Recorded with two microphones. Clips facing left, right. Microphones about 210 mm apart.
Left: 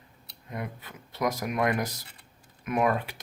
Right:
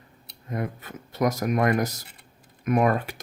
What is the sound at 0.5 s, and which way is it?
Speech, 45° right (ahead or behind).